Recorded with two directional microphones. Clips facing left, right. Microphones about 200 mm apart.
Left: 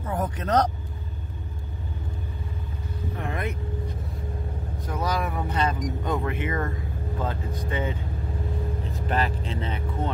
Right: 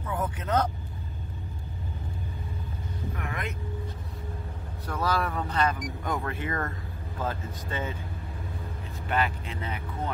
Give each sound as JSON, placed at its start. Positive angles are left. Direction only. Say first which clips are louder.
{"t": 0.0, "sound": "vehicle", "louder": "left 3 dB", "side_deg": 40}
{"t": 3.2, "sound": "vehicle", "louder": "left 6 dB", "side_deg": 30}
{"t": 4.8, "sound": "speech", "louder": "even", "side_deg": 15}
{"t": 9.1, "sound": "speech", "louder": "left 1 dB", "side_deg": 30}